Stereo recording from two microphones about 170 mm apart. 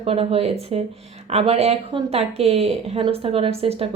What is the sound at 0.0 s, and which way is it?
A woman's voice, 35° right (ahead or behind).